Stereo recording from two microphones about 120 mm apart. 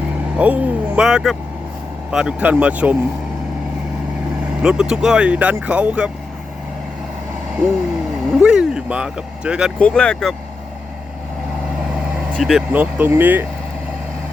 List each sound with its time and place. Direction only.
0.3 s speech: 10° right (ahead or behind)
4.6 s speech: 5° right (ahead or behind)
8.3 s speech: 5° right (ahead or behind)
9.7 s speech: 10° left (ahead or behind)
12.4 s speech: centre (ahead or behind)
12.7 s speech: 15° right (ahead or behind)